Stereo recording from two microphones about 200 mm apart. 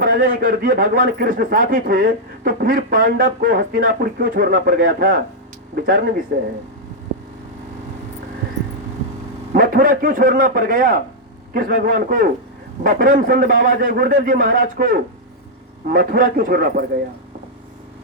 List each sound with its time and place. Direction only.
0.0 s a man's voice: 45° right (ahead or behind)
9.5 s a man's voice: 45° right (ahead or behind)